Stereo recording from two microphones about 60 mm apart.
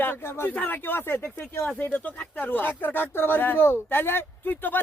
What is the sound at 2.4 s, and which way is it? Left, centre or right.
Speech, left.